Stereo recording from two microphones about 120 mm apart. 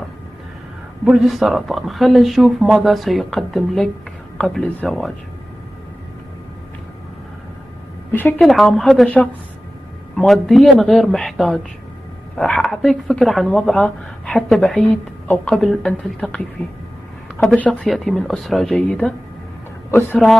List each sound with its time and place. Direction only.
1.0 s speech: centre (ahead or behind)
8.1 s a woman's voice: 15° left (ahead or behind)
8.4 s speech: centre (ahead or behind)
10.1 s speech: centre (ahead or behind)
19.9 s speech: 20° left (ahead or behind)